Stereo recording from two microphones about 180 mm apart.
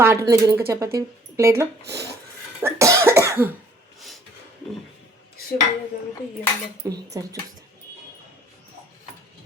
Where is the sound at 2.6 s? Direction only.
15° right (ahead or behind).